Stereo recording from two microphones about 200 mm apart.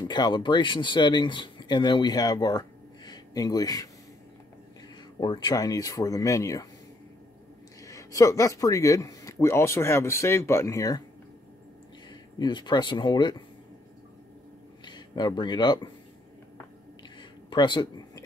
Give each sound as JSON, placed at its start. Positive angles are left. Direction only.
{"t": 0.0, "sound": "speech", "side_deg": 20}
{"t": 5.2, "sound": "speech", "side_deg": 20}
{"t": 7.8, "sound": "speech", "side_deg": 15}
{"t": 12.1, "sound": "speech", "side_deg": 20}
{"t": 14.9, "sound": "speech", "side_deg": 20}
{"t": 17.2, "sound": "a sound", "side_deg": 20}